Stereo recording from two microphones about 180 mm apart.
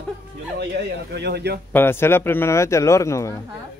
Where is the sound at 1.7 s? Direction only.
10° left (ahead or behind).